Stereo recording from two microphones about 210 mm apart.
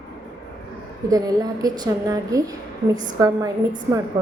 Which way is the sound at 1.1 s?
15° right (ahead or behind).